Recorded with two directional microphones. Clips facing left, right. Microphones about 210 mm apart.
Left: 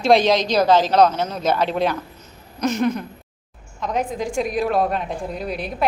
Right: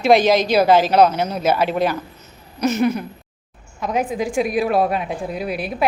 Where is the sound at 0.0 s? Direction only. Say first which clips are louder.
Right 2 dB; 5° right (ahead or behind).